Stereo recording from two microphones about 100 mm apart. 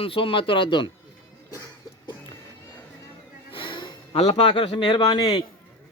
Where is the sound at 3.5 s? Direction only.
60° left (ahead or behind).